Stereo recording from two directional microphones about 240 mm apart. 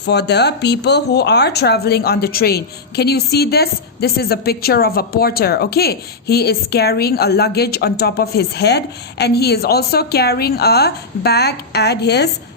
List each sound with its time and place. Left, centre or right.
0.0 s speech: left